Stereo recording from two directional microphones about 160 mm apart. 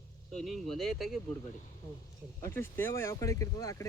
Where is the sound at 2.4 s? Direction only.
15° left (ahead or behind).